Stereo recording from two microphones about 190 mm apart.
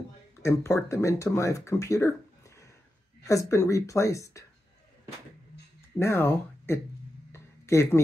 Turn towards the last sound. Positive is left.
turn(degrees=15)  # may be behind; listen again after turning